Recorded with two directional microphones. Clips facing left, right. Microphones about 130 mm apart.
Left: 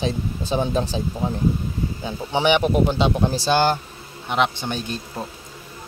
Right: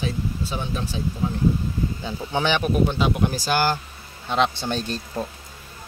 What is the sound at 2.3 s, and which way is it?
Speech, 20° left (ahead or behind).